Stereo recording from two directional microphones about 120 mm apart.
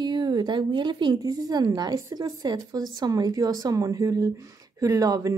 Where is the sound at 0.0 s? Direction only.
35° right (ahead or behind).